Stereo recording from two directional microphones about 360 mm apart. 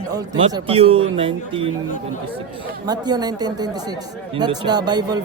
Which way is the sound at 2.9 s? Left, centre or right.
Centre.